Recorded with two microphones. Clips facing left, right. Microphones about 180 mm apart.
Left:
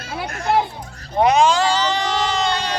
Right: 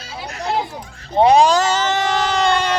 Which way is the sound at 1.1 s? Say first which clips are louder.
Right 3 dB; 30° right (ahead or behind).